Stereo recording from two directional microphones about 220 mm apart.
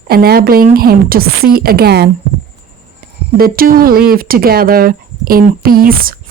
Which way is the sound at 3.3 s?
40° right (ahead or behind).